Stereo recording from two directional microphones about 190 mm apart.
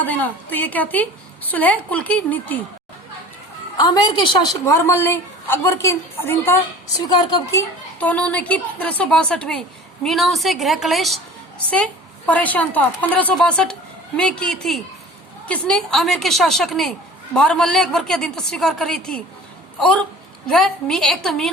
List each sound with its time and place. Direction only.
0.0 s a woman's voice: 10° left (ahead or behind)
3.8 s a woman's voice: 20° left (ahead or behind)
7.1 s a woman's voice: 25° left (ahead or behind)
7.9 s a woman's voice: 5° left (ahead or behind)